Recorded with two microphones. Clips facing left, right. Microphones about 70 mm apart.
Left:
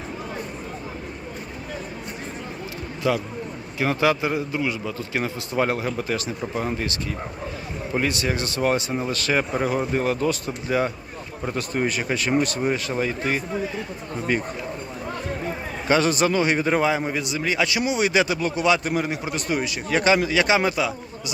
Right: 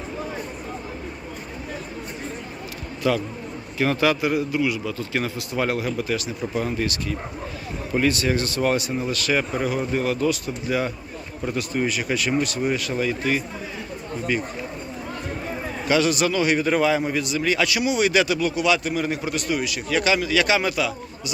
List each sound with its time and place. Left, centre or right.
3.0 s a man's voice: left
8.0 s a man's voice: left
11.5 s a man's voice: left
14.3 s speech: left
15.9 s a man's voice: left
19.0 s a man's voice: left
19.5 s a man's voice: left